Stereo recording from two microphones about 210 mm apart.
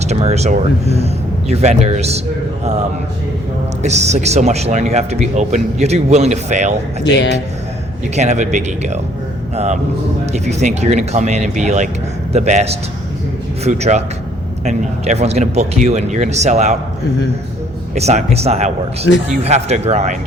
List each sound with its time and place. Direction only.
0.1 s speech: 30° right (ahead or behind)
3.8 s speech: 30° right (ahead or behind)
8.1 s speech: 35° right (ahead or behind)
17.9 s speech: 30° right (ahead or behind)
19.1 s speech: 65° left (ahead or behind)
19.4 s speech: 30° right (ahead or behind)